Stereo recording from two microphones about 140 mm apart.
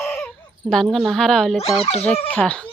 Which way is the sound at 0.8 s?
Centre (ahead or behind).